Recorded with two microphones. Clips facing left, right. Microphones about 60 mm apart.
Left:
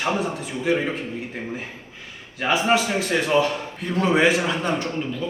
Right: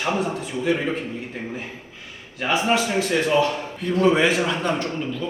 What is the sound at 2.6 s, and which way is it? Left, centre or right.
A man's voice, centre.